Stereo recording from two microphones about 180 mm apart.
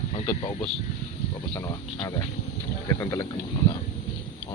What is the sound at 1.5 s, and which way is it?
Speech, 20° left (ahead or behind).